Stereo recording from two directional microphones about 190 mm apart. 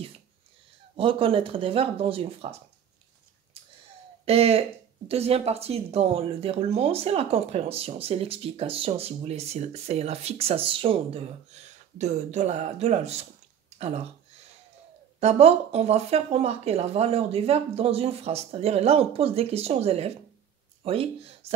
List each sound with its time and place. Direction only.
0.9 s speech: 30° right (ahead or behind)
4.3 s speech: 30° right (ahead or behind)
15.1 s speech: 35° right (ahead or behind)